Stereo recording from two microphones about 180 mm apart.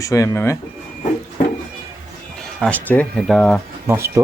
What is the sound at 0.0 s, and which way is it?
Speech, 15° left (ahead or behind).